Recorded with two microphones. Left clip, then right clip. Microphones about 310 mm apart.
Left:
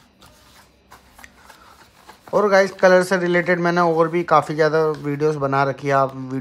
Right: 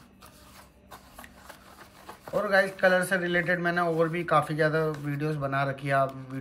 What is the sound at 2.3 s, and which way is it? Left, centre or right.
Speech, centre.